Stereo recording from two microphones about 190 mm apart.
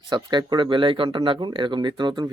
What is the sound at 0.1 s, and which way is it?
Speech, 25° right (ahead or behind).